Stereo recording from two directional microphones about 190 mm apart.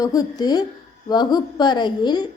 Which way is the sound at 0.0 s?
20° left (ahead or behind).